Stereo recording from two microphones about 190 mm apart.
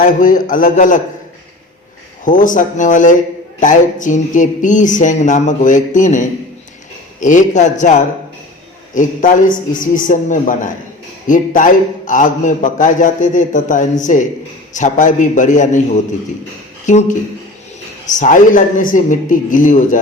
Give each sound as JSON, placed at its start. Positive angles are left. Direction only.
{"t": 0.0, "sound": "a man's voice", "side_deg": 45}
{"t": 2.2, "sound": "a man's voice", "side_deg": 45}
{"t": 16.8, "sound": "a man's voice", "side_deg": 40}